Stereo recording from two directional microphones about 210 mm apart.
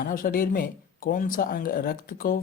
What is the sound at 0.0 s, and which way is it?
Speech, 40° left (ahead or behind).